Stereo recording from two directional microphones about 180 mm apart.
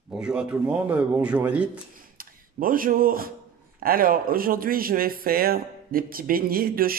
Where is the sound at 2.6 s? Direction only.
50° right (ahead or behind).